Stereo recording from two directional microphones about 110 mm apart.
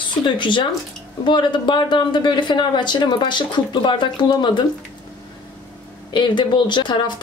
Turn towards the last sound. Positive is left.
turn(degrees=45)  # may be behind; listen again after turning